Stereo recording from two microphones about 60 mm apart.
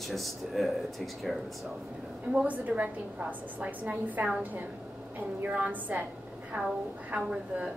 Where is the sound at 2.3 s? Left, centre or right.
Right.